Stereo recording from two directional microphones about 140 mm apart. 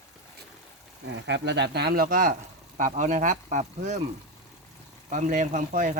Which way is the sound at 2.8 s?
65° right (ahead or behind).